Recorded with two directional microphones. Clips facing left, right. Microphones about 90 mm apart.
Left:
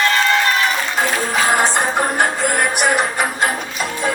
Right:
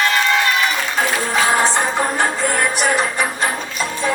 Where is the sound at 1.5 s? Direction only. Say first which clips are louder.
Even; 15° left (ahead or behind).